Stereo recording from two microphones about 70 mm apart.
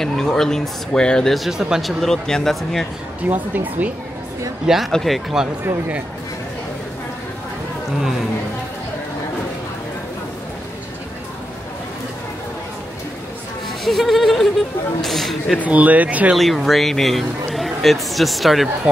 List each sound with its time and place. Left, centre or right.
0.0 s speech: centre
1.3 s a man's voice: centre
3.3 s speech: right
4.6 s a man's voice: centre
13.8 s a sound: centre
15.0 s a man's voice: centre
15.6 s speech: right
16.3 s a man's voice: centre